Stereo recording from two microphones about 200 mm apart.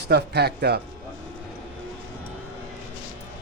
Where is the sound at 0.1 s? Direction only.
55° right (ahead or behind).